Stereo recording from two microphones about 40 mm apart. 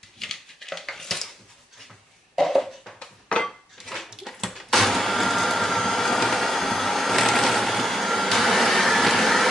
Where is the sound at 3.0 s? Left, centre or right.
Centre.